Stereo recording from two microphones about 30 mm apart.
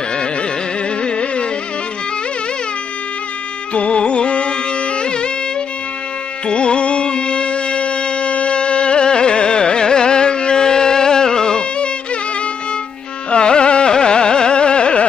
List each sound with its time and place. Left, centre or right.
0.1 s carnatic music: left
3.7 s music: left
6.4 s music: left
13.3 s carnatic music: left